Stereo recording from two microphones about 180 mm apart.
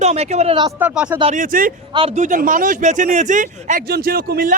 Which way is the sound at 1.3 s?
50° right (ahead or behind).